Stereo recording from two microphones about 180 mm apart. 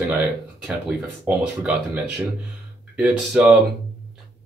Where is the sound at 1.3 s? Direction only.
5° right (ahead or behind).